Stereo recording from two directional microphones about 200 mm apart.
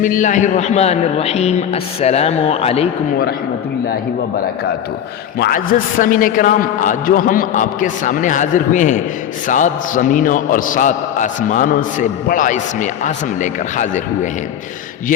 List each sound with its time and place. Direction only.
0.0 s a man's voice: 40° left (ahead or behind)
5.4 s a man's voice: 45° left (ahead or behind)